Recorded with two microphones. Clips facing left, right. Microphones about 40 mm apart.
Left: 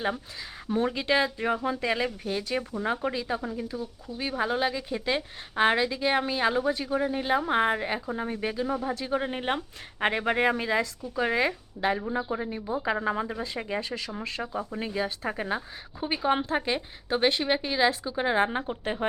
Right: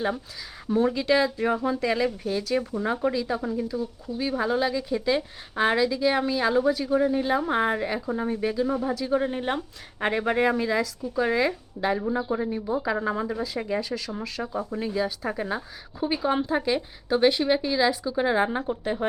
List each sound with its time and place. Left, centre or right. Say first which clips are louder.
0.9 s speech: right 3 dB; centre
3.4 s speech: right 5 dB; centre
8.7 s speech: right 3 dB; centre
9.0 s speech: right 3 dB; centre
14.4 s speech: right 5 dB; centre
14.8 s speech: right 4 dB; left